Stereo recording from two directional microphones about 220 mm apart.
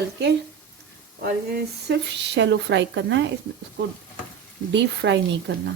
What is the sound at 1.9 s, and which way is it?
Speech, 50° right (ahead or behind).